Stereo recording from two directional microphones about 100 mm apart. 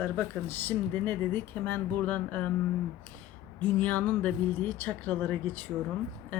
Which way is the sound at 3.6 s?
15° left (ahead or behind).